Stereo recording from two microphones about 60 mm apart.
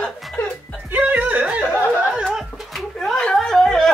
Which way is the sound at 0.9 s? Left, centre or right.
Right.